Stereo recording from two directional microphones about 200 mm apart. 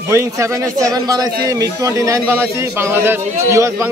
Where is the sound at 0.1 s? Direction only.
15° right (ahead or behind).